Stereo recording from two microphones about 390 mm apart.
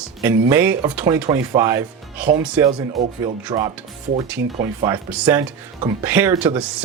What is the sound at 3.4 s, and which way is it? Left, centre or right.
Speech, centre.